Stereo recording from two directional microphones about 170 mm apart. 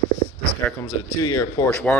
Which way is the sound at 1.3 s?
15° left (ahead or behind).